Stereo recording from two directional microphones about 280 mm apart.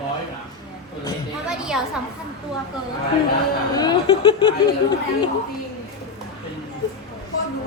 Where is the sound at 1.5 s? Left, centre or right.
Centre.